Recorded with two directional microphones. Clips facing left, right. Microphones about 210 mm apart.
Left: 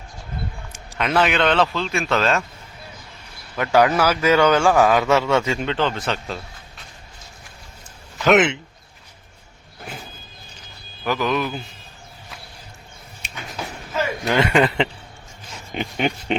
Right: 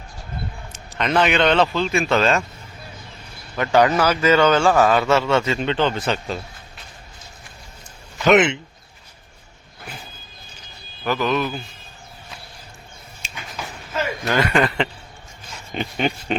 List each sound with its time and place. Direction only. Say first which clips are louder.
0.7 s a man's voice: right 1 dB; 5° left (ahead or behind)
3.5 s a man's voice: even; 5° left (ahead or behind)
5.6 s a man's voice: right 2 dB; centre (ahead or behind)
8.2 s a man's voice: right 1 dB; centre (ahead or behind)
11.0 s a man's voice: right 1 dB; 10° left (ahead or behind)
13.2 s a sound: even; 65° left (ahead or behind)
13.9 s a man's voice: left 1 dB; 20° left (ahead or behind)